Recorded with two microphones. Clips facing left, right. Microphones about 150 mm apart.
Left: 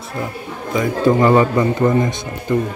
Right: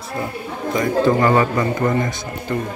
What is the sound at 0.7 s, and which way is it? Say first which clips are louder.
A man's voice: left 1 dB; 15° left (ahead or behind).